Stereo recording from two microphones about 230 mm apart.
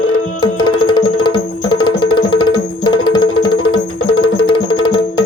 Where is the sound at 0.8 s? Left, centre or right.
Left.